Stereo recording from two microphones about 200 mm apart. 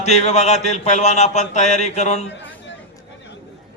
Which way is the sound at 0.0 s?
35° left (ahead or behind).